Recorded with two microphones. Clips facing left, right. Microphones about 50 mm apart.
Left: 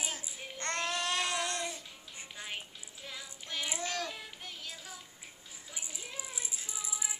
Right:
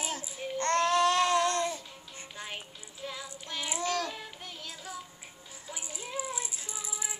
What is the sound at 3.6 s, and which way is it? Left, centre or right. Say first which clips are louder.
Child singing: right 6 dB; centre.